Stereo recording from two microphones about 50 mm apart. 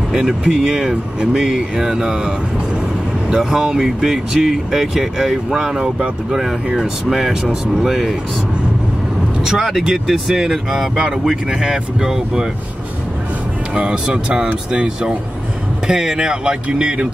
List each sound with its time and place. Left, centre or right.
0.1 s speech: centre
3.3 s speech: centre
9.4 s speech: centre
13.7 s speech: centre